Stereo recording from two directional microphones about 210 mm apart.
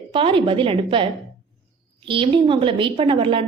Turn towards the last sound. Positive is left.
turn(degrees=-25)  # may be behind; listen again after turning